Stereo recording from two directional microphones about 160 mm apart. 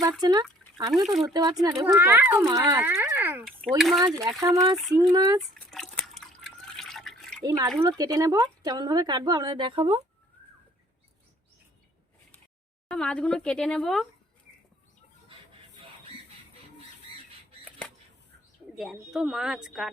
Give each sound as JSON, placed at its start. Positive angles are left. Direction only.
{"t": 0.2, "sound": "speech", "side_deg": -25}
{"t": 1.0, "sound": "a woman's voice", "side_deg": 0}
{"t": 1.3, "sound": "speech", "side_deg": -25}
{"t": 1.8, "sound": "speech", "side_deg": -15}
{"t": 3.4, "sound": "a woman's voice", "side_deg": 0}
{"t": 4.4, "sound": "speech", "side_deg": -25}
{"t": 5.5, "sound": "drip", "side_deg": 5}
{"t": 7.4, "sound": "speech", "side_deg": -20}
{"t": 12.9, "sound": "a woman's voice", "side_deg": 5}
{"t": 17.7, "sound": "a sound", "side_deg": 5}
{"t": 18.8, "sound": "a woman's voice", "side_deg": 0}